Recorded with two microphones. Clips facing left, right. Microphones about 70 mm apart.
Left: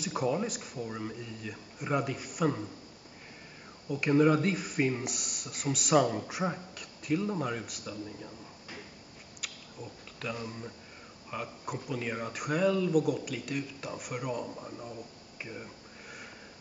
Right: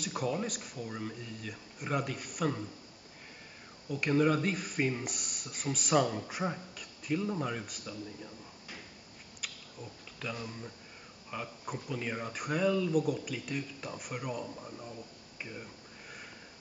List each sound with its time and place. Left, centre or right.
0.0 s speech: centre
3.9 s speech: centre
10.2 s speech: centre